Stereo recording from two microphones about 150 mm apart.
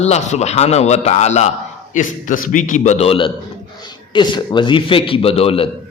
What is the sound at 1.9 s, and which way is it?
A man's voice, 60° left (ahead or behind).